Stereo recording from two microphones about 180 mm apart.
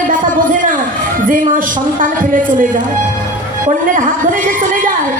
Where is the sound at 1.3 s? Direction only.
50° right (ahead or behind).